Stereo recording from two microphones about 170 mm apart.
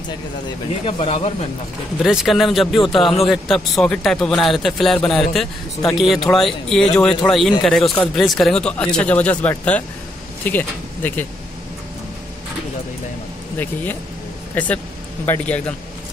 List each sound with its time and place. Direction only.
0.8 s speech: 35° left (ahead or behind)
2.0 s speech: centre (ahead or behind)
14.5 s speech: 10° left (ahead or behind)